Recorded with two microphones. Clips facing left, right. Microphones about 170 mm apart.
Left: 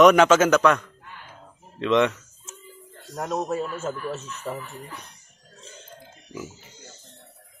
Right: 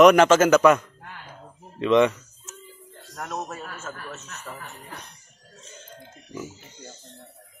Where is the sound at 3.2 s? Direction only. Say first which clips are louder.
Left 5 dB; 15° left (ahead or behind).